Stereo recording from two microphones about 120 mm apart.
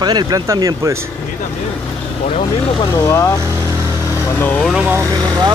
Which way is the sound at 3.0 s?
25° left (ahead or behind).